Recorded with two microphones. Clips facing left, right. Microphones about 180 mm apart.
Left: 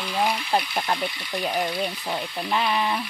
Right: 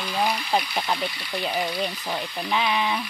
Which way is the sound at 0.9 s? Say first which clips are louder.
Left 1 dB; 25° left (ahead or behind).